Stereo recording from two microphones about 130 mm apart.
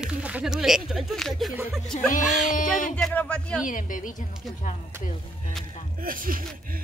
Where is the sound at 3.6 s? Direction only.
90° left.